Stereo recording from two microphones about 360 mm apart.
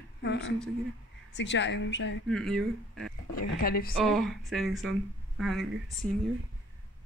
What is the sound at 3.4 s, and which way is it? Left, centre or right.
Speech, left.